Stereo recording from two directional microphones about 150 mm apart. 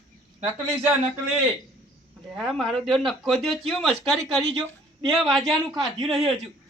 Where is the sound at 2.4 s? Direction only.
Centre (ahead or behind).